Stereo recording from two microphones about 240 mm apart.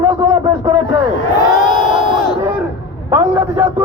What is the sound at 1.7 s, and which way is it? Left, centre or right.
Crowd, left.